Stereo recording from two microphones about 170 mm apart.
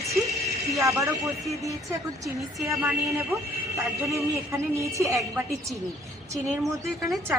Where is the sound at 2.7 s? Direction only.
15° right (ahead or behind).